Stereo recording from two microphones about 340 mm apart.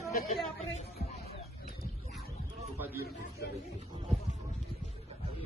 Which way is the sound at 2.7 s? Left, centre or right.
Centre.